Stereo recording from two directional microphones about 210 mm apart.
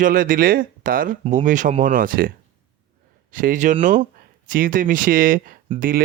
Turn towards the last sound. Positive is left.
turn(degrees=-40)  # may be behind; listen again after turning